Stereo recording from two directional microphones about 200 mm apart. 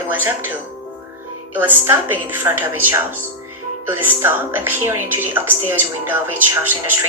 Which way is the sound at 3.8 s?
10° right (ahead or behind).